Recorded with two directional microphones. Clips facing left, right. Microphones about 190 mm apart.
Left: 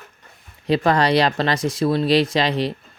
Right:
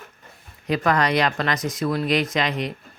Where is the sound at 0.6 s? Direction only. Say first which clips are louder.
Left 3 dB; 30° left (ahead or behind).